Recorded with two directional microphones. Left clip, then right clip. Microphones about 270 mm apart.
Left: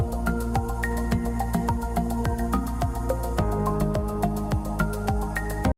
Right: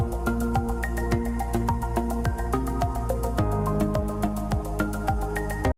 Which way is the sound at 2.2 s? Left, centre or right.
Centre.